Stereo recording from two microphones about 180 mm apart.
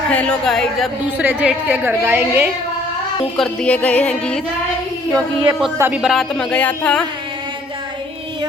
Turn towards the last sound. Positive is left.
turn(degrees=5)  # may be behind; listen again after turning